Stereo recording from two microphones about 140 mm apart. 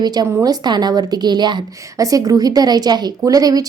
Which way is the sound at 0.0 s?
30° right (ahead or behind).